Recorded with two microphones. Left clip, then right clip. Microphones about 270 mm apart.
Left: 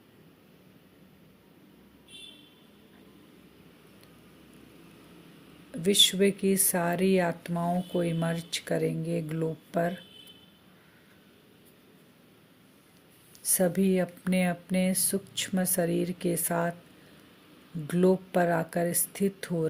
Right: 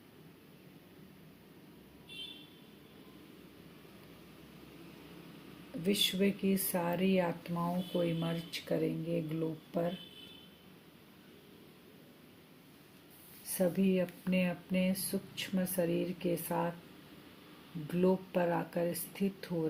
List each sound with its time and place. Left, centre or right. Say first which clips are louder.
5.8 s speech: left 9 dB; left
13.6 s speech: left 5 dB; left
17.8 s speech: left 7 dB; left